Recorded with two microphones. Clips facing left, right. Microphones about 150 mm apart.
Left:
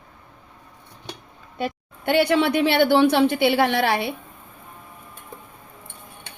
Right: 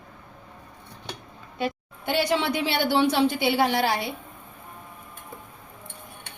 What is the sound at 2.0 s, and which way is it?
A woman's voice, 60° left (ahead or behind).